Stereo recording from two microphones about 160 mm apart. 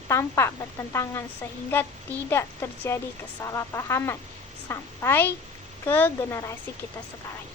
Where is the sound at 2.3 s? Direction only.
15° left (ahead or behind).